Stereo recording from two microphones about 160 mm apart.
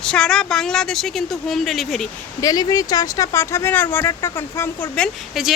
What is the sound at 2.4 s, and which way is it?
Speech, 25° left (ahead or behind).